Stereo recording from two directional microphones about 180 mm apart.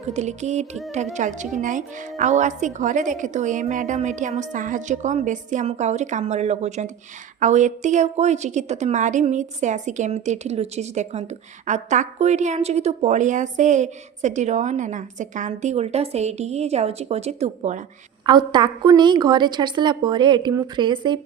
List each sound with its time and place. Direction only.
0.1 s a woman's voice: 40° right (ahead or behind)
18.3 s a woman's voice: 25° right (ahead or behind)